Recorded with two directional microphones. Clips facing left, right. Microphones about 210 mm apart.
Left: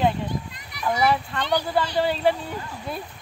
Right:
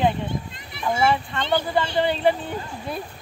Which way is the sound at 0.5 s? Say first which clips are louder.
Right 1 dB; 25° right (ahead or behind).